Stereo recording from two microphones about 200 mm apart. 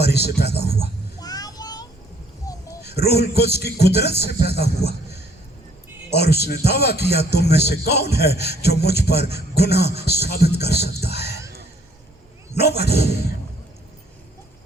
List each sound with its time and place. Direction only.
0.0 s a man's voice: 55° left (ahead or behind)
1.2 s child singing: 20° left (ahead or behind)
2.5 s a sound: 15° left (ahead or behind)
2.8 s a man's voice: 55° left (ahead or behind)
12.5 s a man's voice: 55° left (ahead or behind)